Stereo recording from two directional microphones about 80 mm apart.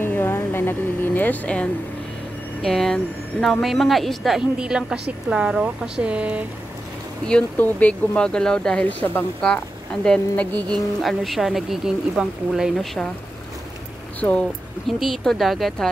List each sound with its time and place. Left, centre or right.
0.0 s a sound: left
2.6 s a woman's voice: centre
7.5 s speech: left
8.2 s speech: centre
11.0 s speech: centre
14.9 s speech: centre